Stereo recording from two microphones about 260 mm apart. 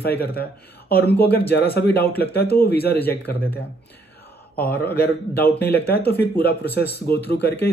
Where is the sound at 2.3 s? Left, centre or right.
Left.